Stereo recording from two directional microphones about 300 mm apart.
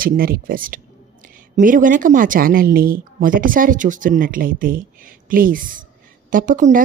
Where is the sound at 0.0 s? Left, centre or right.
Right.